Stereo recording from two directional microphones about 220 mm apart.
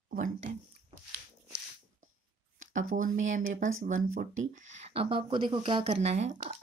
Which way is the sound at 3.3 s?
35° right (ahead or behind).